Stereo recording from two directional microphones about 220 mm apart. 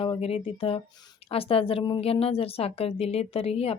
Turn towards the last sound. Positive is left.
turn(degrees=25)  # may be behind; listen again after turning